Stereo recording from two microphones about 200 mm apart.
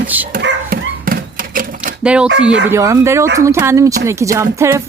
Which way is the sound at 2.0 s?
5° right (ahead or behind).